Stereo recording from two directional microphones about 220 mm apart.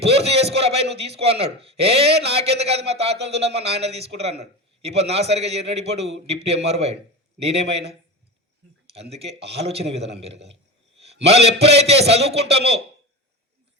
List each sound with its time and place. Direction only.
0.0 s a man's voice: 25° right (ahead or behind)